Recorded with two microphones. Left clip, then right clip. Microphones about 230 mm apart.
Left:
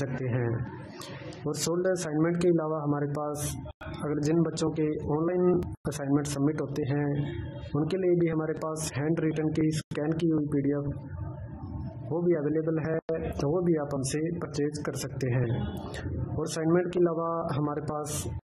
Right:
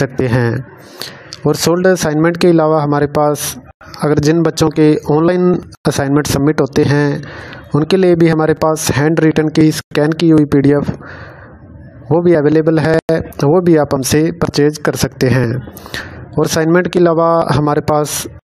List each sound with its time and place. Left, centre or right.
1.4 s a man's voice: right
12.1 s a man's voice: right
16.5 s a man's voice: right